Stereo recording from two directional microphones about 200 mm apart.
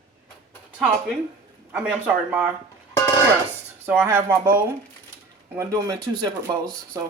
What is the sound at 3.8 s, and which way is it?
Speech, 10° right (ahead or behind).